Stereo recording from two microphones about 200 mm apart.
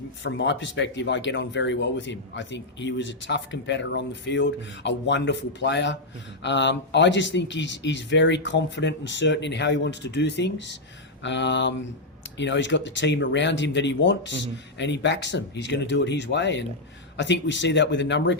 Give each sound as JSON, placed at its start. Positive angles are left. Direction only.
{"t": 0.2, "sound": "speech", "side_deg": 65}